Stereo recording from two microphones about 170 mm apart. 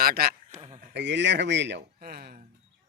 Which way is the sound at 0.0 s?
65° right (ahead or behind).